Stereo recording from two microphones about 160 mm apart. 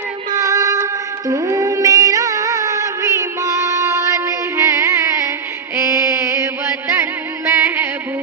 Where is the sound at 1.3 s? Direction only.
20° right (ahead or behind).